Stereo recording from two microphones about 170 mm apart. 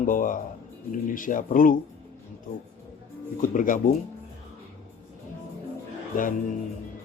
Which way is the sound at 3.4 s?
50° left (ahead or behind).